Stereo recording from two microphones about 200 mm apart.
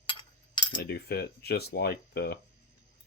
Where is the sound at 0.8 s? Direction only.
55° left (ahead or behind).